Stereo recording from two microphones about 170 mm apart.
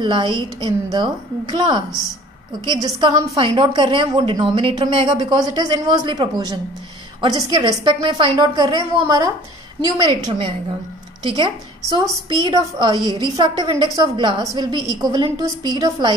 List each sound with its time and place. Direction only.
0.0 s a woman's voice: 25° right (ahead or behind)